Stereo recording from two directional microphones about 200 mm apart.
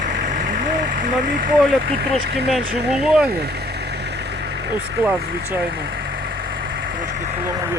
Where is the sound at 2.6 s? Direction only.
55° right (ahead or behind).